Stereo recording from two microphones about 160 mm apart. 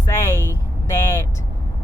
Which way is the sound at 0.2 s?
15° left (ahead or behind).